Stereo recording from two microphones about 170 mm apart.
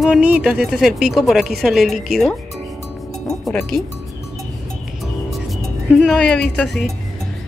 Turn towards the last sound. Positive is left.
turn(degrees=0)  # may be behind; listen again after turning